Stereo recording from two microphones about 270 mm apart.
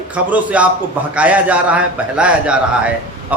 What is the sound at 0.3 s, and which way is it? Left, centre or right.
A man's voice, centre.